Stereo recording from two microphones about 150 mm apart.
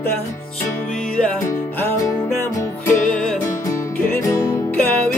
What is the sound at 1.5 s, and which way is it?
Music, 20° left (ahead or behind).